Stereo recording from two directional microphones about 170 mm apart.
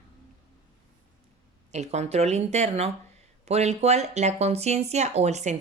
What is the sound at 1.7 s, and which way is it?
Speech, 40° right (ahead or behind).